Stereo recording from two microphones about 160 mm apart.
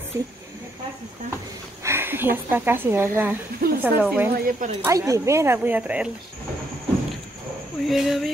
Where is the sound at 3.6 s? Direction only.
65° right (ahead or behind).